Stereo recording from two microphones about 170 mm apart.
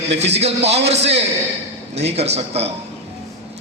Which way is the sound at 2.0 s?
40° right (ahead or behind).